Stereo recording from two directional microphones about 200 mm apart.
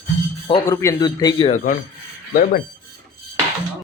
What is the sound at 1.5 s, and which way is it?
Speech, 40° left (ahead or behind).